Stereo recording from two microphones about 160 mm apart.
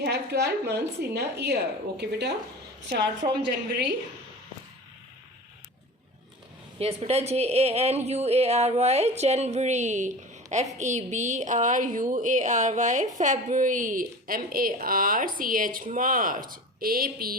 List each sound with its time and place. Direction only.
0.0 s a woman's voice: 90° right
3.2 s a woman's voice: 45° right (ahead or behind)
6.7 s a woman's voice: 40° right (ahead or behind); by 17.3 s 65° right (ahead or behind)